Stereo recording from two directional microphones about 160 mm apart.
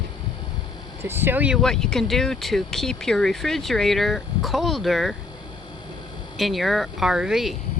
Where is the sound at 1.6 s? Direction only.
5° left (ahead or behind).